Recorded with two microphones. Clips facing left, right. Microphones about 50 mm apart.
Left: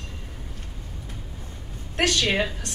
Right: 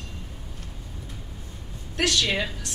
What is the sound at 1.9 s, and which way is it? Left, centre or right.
Speech, left.